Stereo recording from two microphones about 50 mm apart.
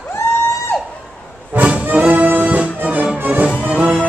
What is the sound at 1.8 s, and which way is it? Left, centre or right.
Music, right.